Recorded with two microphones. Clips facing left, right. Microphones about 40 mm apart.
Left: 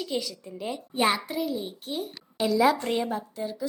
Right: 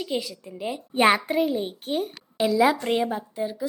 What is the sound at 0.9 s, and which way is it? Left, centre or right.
A child's voice, right.